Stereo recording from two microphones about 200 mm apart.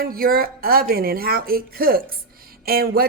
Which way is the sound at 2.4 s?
50° right (ahead or behind).